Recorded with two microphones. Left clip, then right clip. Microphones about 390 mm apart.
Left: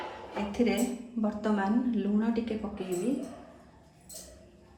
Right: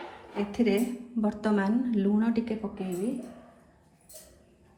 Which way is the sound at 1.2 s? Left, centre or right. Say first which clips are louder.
Right 2 dB; centre.